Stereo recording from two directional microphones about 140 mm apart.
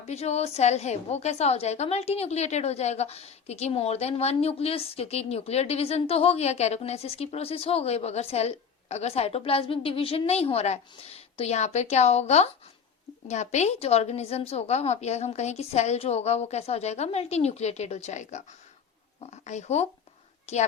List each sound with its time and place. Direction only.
0.1 s a woman's voice: 50° left (ahead or behind)